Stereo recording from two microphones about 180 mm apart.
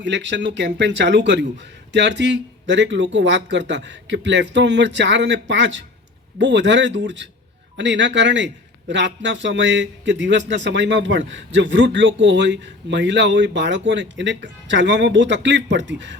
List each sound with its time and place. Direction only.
0.0 s speech: 75° right (ahead or behind)